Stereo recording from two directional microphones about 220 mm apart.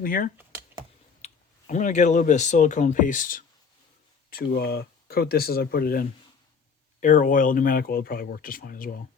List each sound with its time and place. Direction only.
0.0 s speech: 40° left (ahead or behind)
0.3 s computer keyboard: 10° right (ahead or behind)
1.2 s speech: 35° left (ahead or behind)